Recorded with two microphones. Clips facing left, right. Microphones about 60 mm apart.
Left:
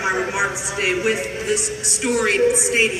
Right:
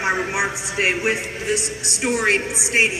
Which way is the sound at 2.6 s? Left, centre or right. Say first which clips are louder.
Even; right.